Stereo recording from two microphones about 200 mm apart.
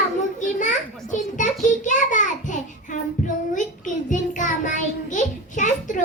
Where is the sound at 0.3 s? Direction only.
40° left (ahead or behind).